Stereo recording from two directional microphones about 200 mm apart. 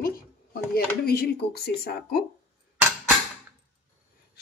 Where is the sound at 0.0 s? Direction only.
50° left (ahead or behind).